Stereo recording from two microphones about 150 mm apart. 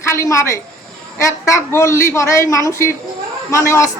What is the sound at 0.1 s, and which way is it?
Speech, 20° left (ahead or behind).